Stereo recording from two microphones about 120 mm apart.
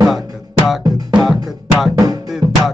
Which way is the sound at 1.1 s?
Centre (ahead or behind).